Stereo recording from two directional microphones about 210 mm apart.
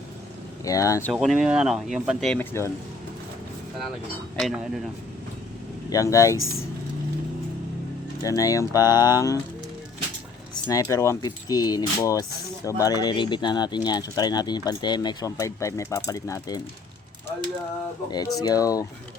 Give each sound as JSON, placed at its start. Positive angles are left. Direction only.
{"t": 0.6, "sound": "speech", "side_deg": 15}
{"t": 1.1, "sound": "speech", "side_deg": 0}
{"t": 4.4, "sound": "speech", "side_deg": 0}
{"t": 5.9, "sound": "speech", "side_deg": 15}
{"t": 8.2, "sound": "speech", "side_deg": 15}
{"t": 10.5, "sound": "speech", "side_deg": 15}
{"t": 18.3, "sound": "speech", "side_deg": 15}